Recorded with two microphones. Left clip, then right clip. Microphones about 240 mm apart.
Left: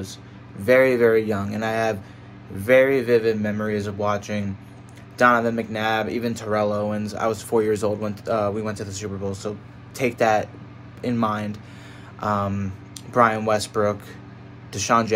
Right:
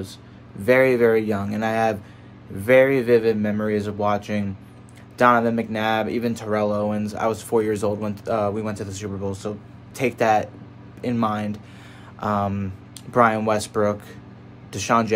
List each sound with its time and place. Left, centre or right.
0.7 s speech: centre